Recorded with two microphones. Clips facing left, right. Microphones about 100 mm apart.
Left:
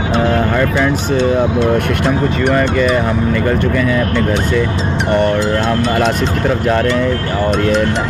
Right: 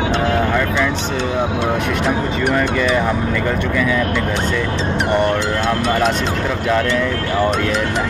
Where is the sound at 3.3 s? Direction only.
40° left (ahead or behind).